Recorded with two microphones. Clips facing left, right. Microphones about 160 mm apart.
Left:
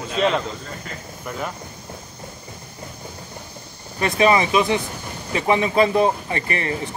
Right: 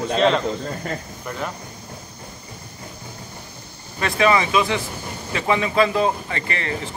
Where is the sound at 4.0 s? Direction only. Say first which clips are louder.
Left 1 dB; 20° left (ahead or behind).